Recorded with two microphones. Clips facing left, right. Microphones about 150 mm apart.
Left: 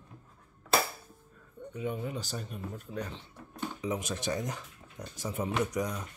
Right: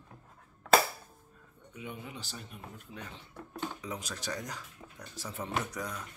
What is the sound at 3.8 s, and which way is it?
Speech, 20° left (ahead or behind).